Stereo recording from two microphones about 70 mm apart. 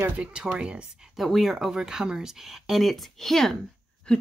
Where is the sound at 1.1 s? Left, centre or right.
Centre.